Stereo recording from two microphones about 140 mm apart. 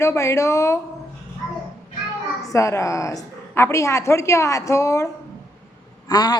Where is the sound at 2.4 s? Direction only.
20° left (ahead or behind).